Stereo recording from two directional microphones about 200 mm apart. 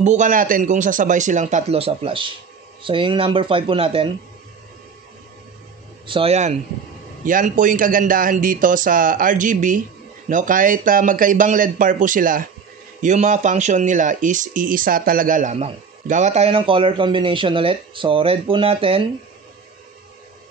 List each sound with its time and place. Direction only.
0.0 s speech: 35° right (ahead or behind)
6.0 s speech: 30° right (ahead or behind)